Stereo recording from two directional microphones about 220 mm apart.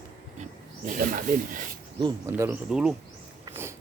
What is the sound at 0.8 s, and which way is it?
Speech, 35° right (ahead or behind).